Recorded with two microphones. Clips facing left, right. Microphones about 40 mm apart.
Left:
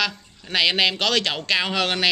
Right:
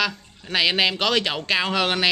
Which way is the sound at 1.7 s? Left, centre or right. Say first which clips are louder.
Right 1 dB; centre.